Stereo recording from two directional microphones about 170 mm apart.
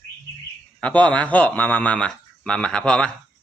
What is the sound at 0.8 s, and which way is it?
Speech, 10° left (ahead or behind).